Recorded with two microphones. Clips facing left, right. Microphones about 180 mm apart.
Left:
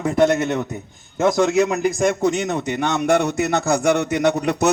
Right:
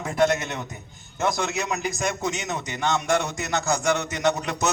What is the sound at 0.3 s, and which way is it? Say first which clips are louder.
A man's voice: left 10 dB; 55° left (ahead or behind).